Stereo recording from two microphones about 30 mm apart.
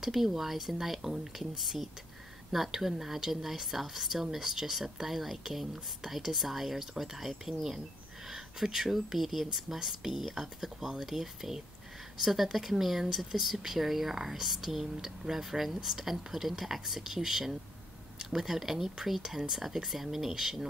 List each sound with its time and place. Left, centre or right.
0.0 s speech: centre
1.5 s speech: centre